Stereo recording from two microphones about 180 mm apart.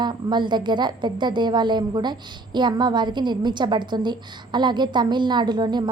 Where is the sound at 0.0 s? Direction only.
25° right (ahead or behind).